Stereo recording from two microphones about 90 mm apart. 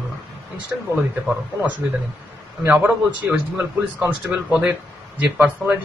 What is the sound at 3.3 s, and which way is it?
Speech, 10° right (ahead or behind).